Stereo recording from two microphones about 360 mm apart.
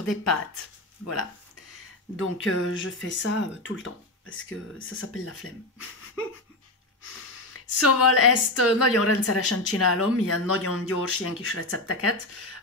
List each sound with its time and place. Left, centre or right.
0.1 s speech: left
2.1 s a woman's voice: left
7.5 s a woman's voice: left